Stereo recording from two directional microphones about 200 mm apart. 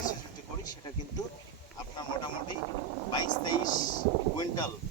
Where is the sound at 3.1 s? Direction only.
20° left (ahead or behind).